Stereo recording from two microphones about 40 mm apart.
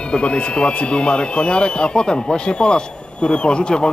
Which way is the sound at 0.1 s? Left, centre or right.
Left.